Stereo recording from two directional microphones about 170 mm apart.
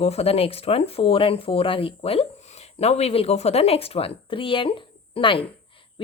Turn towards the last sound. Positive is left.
turn(degrees=30)  # may be behind; listen again after turning